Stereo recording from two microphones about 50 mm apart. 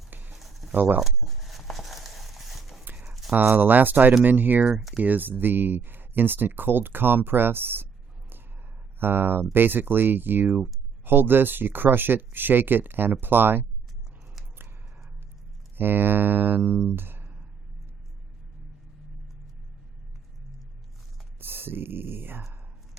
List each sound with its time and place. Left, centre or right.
0.1 s a sound: right
0.3 s a sound: centre
0.7 s speech: right
1.0 s a sound: centre
3.3 s speech: right
9.0 s speech: right
15.8 s speech: right
16.9 s music: right
21.3 s speech: right